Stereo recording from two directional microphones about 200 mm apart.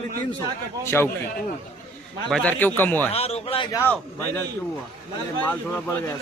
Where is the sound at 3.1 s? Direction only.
30° left (ahead or behind).